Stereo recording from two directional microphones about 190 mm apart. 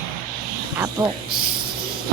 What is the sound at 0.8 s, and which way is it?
Speech, 15° right (ahead or behind).